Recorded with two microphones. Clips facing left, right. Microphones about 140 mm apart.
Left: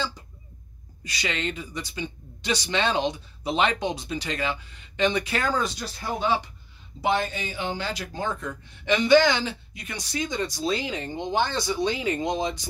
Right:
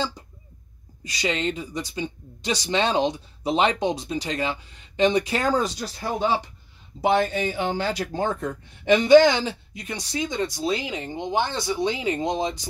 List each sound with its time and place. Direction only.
1.0 s speech: 35° right (ahead or behind)
7.0 s speech: 50° right (ahead or behind); by 12.6 s 35° right (ahead or behind)